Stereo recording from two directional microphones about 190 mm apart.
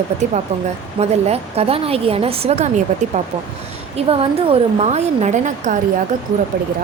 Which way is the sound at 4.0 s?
30° right (ahead or behind).